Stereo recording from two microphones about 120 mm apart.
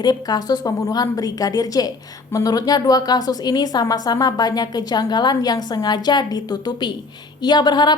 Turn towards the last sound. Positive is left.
turn(degrees=35)  # may be behind; listen again after turning